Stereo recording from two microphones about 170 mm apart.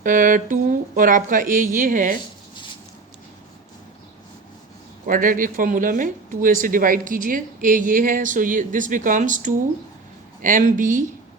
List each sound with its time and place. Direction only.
0.0 s speech: 50° right (ahead or behind)
5.0 s speech: 55° right (ahead or behind)